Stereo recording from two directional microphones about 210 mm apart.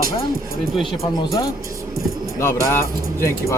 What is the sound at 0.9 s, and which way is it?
Speech, 20° left (ahead or behind).